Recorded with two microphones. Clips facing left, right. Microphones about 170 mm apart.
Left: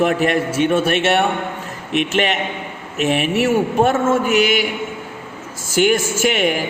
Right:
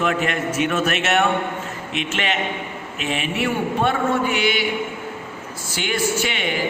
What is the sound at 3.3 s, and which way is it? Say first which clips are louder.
A man's voice: left 6 dB; 40° left (ahead or behind).